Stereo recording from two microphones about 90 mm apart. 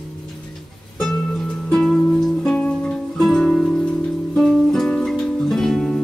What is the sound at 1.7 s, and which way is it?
Music, 5° left (ahead or behind).